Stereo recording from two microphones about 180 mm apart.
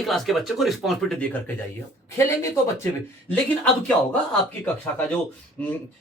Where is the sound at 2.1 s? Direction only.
15° left (ahead or behind).